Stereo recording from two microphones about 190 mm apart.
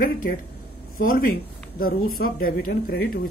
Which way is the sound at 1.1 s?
50° left (ahead or behind).